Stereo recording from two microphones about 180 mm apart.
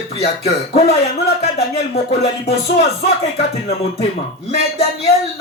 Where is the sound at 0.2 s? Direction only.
35° left (ahead or behind).